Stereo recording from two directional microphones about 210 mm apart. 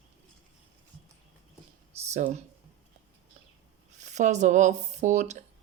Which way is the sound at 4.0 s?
35° right (ahead or behind).